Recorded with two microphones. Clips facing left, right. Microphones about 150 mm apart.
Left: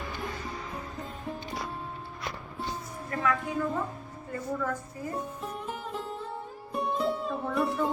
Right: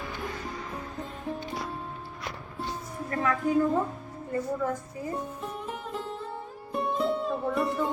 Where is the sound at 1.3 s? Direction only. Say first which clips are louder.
Right 4 dB; centre (ahead or behind).